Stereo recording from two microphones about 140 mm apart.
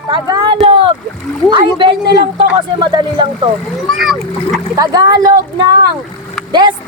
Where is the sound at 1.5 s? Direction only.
35° right (ahead or behind).